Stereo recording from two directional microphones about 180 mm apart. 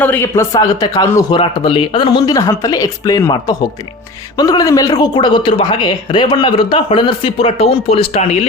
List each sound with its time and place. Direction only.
0.0 s a man's voice: 10° left (ahead or behind); by 8.2 s 35° left (ahead or behind)